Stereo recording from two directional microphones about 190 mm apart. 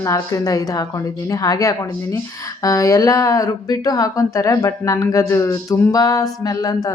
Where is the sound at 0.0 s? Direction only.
15° left (ahead or behind).